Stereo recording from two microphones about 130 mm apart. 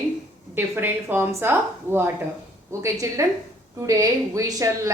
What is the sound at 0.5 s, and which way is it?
A woman's voice, 15° right (ahead or behind).